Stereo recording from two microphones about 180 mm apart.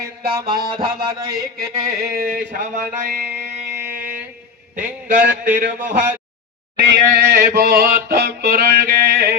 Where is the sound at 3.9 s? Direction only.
50° right (ahead or behind).